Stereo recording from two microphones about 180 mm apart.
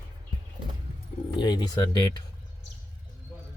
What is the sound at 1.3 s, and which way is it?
Speech, 25° left (ahead or behind).